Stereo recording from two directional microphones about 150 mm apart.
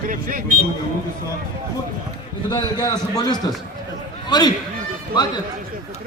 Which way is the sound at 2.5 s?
30° left (ahead or behind).